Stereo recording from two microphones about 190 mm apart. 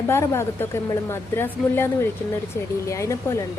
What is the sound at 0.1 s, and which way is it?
A woman's voice, 15° left (ahead or behind).